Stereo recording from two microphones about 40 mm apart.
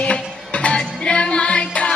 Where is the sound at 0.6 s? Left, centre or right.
Left.